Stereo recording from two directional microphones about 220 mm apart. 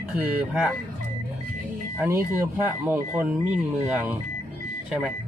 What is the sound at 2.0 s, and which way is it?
Speech, 10° right (ahead or behind).